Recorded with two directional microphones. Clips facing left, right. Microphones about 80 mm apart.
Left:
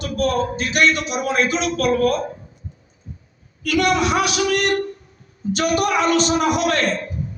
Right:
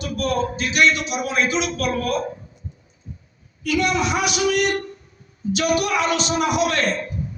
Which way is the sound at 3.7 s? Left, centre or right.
Left.